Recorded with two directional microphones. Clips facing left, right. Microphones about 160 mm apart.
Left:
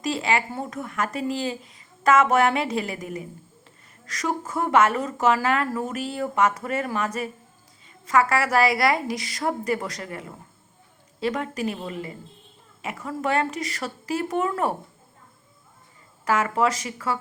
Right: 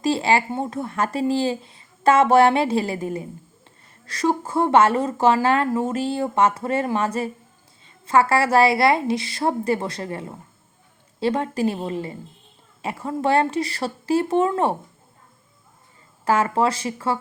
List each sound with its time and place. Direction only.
0.0 s speech: 30° right (ahead or behind)
16.2 s speech: 30° right (ahead or behind)